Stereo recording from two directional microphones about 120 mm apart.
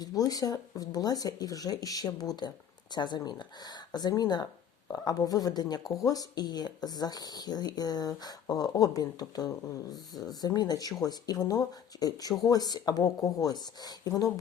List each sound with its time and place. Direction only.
0.0 s speech: 30° left (ahead or behind)